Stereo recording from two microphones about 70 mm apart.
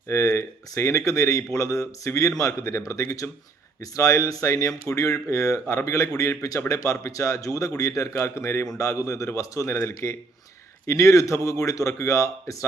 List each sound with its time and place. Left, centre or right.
0.1 s a man's voice: left
8.8 s speech: left